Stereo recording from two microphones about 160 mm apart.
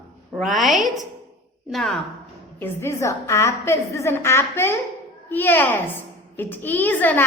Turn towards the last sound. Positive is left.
turn(degrees=10)  # may be behind; listen again after turning